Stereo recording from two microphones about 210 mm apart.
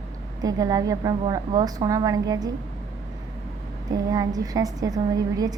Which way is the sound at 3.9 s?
20° right (ahead or behind).